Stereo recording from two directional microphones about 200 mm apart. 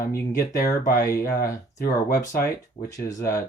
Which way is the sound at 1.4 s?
15° left (ahead or behind).